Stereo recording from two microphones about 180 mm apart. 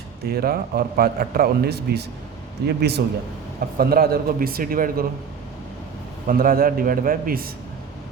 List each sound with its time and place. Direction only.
0.3 s a man's voice: 60° right (ahead or behind)
6.2 s a man's voice: 55° right (ahead or behind)